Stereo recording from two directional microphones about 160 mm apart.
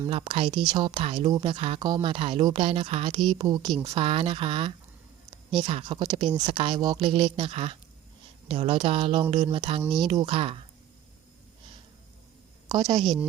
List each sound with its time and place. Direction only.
0.1 s speech: 35° right (ahead or behind)
12.6 s a woman's voice: 25° right (ahead or behind)